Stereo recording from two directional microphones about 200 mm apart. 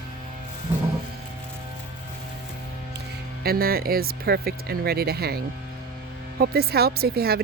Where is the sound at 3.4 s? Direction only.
50° right (ahead or behind).